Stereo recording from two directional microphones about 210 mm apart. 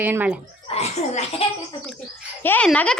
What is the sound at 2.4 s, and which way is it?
Speech, 10° left (ahead or behind).